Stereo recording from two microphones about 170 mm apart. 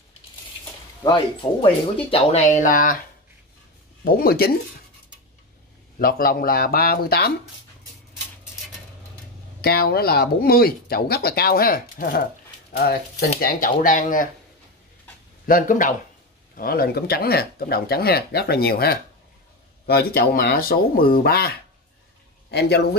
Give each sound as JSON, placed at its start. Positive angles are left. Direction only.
{"t": 1.0, "sound": "speech", "side_deg": 30}
{"t": 4.0, "sound": "speech", "side_deg": 60}
{"t": 5.9, "sound": "speech", "side_deg": 60}
{"t": 9.6, "sound": "a man's voice", "side_deg": 65}
{"t": 13.4, "sound": "speech", "side_deg": 55}
{"t": 15.4, "sound": "a man's voice", "side_deg": 55}